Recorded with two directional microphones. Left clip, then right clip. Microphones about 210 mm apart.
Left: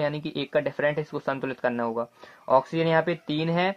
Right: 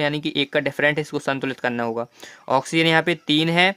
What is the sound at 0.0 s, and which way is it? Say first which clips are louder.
Speech: right 6 dB; 30° right (ahead or behind).